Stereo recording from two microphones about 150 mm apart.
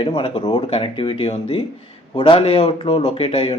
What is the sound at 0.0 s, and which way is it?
Speech, 40° left (ahead or behind).